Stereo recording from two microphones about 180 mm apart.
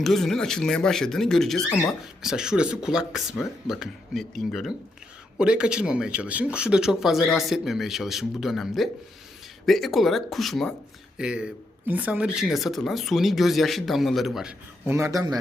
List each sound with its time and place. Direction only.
0.0 s speech: centre (ahead or behind)
14.8 s speech: 15° right (ahead or behind)